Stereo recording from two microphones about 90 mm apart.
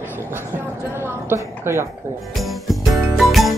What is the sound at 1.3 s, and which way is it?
Speech, 30° right (ahead or behind).